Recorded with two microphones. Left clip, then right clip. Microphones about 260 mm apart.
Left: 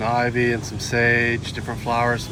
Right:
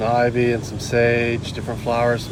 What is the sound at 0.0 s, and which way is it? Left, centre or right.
Speech, left.